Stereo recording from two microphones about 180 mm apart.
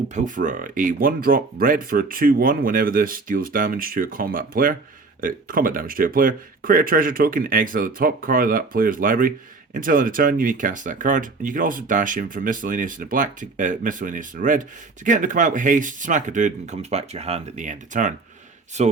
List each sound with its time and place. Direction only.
0.1 s speech: 45° right (ahead or behind)